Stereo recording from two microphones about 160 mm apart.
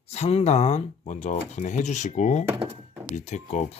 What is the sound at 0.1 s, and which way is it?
Speech, 40° left (ahead or behind).